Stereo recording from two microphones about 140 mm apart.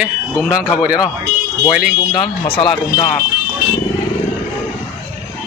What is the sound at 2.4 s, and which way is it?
Speech, 35° left (ahead or behind).